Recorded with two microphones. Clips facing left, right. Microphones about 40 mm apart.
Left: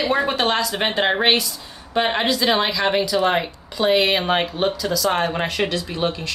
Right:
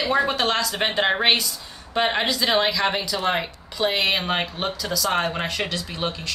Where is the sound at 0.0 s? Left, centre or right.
Centre.